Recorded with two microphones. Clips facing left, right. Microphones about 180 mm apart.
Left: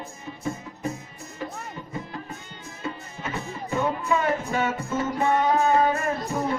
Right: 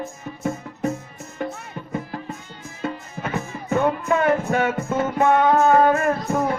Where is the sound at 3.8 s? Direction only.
60° right (ahead or behind).